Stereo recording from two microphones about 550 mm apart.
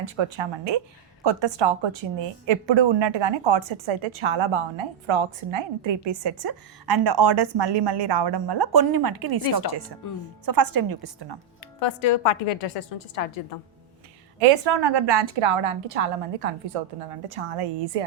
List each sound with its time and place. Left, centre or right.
0.0 s a woman's voice: right
10.0 s a woman's voice: left
10.4 s a woman's voice: right
11.8 s a woman's voice: left
14.3 s a woman's voice: right
16.2 s a woman's voice: right
17.3 s a woman's voice: right